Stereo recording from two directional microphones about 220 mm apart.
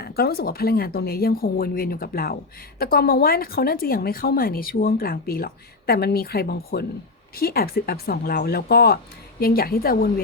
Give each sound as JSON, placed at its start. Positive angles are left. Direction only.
{"t": 0.0, "sound": "speech", "side_deg": 45}